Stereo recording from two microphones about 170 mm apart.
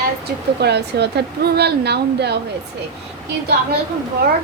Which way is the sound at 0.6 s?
75° right (ahead or behind).